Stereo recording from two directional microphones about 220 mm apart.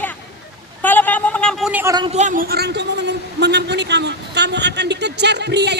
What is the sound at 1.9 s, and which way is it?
A man's voice, 25° right (ahead or behind).